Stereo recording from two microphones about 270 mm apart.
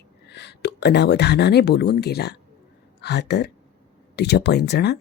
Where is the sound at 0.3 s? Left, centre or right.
Left.